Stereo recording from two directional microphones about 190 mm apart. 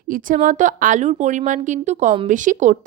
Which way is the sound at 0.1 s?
45° right (ahead or behind).